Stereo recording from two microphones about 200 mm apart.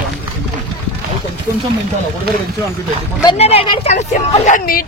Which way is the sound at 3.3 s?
30° left (ahead or behind).